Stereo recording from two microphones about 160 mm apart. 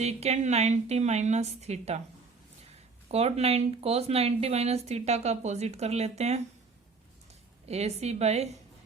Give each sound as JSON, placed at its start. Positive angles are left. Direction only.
{"t": 0.0, "sound": "a woman's voice", "side_deg": -45}
{"t": 3.1, "sound": "speech", "side_deg": -40}
{"t": 7.7, "sound": "speech", "side_deg": -40}